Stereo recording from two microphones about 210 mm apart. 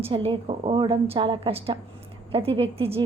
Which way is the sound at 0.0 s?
25° right (ahead or behind).